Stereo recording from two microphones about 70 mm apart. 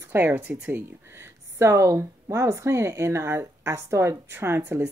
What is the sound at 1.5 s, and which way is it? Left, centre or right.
Speech, right.